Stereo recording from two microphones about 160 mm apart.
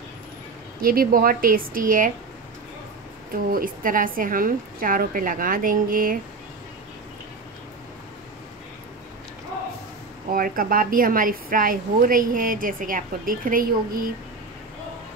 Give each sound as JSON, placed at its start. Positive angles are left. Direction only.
{"t": 0.8, "sound": "a woman's voice", "side_deg": -65}
{"t": 3.4, "sound": "a woman's voice", "side_deg": -65}
{"t": 10.3, "sound": "a woman's voice", "side_deg": -65}